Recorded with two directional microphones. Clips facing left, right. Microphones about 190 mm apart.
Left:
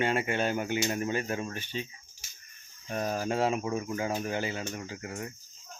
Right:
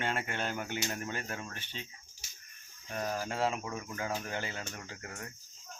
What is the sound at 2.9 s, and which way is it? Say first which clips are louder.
Speech: left 5 dB; 20° left (ahead or behind).